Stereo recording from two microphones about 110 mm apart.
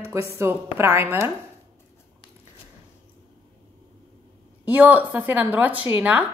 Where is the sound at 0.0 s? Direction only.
25° right (ahead or behind).